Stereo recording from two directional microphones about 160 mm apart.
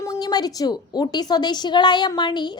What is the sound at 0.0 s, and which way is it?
A woman's voice, 20° left (ahead or behind).